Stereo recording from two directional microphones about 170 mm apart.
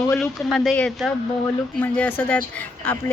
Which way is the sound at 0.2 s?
5° left (ahead or behind).